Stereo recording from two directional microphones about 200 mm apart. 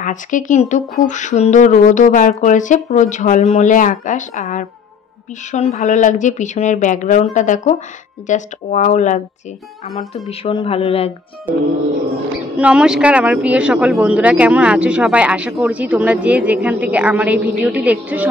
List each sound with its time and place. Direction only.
0.0 s speech: 40° left (ahead or behind)
12.5 s a woman's voice: 5° right (ahead or behind)